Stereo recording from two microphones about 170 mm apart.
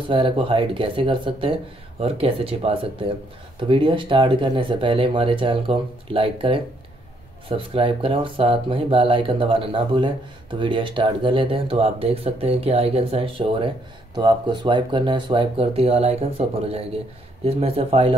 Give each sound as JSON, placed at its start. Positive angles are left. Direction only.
{"t": 0.1, "sound": "speech", "side_deg": -30}